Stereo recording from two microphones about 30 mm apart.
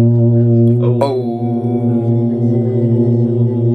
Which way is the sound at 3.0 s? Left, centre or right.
Left.